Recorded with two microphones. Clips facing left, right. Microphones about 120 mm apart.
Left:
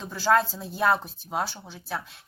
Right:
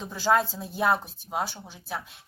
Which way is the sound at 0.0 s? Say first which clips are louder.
Left 1 dB; 15° right (ahead or behind).